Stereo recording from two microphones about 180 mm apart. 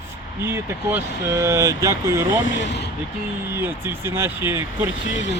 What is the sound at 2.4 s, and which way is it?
Speech, 90° left.